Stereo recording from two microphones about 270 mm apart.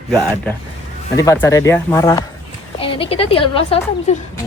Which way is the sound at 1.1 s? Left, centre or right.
Centre.